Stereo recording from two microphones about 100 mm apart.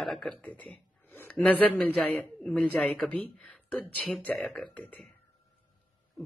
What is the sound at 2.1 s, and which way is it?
Speech, 10° left (ahead or behind).